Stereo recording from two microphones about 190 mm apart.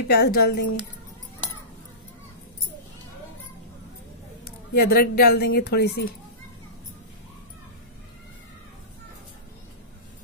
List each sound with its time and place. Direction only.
0.1 s speech: 55° left (ahead or behind)
4.7 s speech: 55° left (ahead or behind)